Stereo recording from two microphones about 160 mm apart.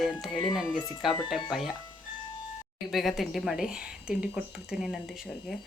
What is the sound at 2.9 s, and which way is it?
Speech, centre (ahead or behind).